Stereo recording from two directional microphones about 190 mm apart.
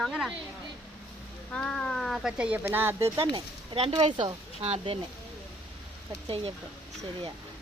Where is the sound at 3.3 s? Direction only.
30° right (ahead or behind).